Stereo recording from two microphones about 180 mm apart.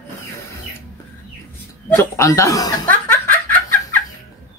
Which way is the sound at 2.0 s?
15° left (ahead or behind).